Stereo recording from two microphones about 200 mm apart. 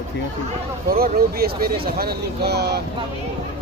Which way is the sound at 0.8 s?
50° right (ahead or behind).